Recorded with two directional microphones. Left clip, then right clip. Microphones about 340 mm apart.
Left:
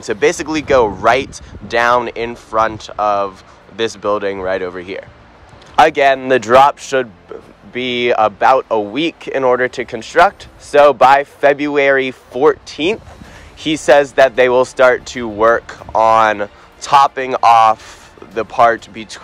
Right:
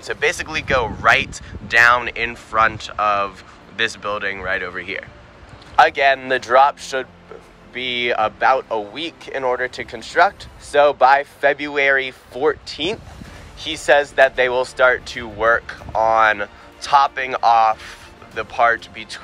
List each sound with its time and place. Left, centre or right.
0.0 s speech: centre